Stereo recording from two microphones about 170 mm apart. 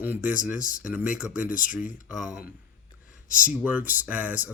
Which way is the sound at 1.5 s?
50° left (ahead or behind).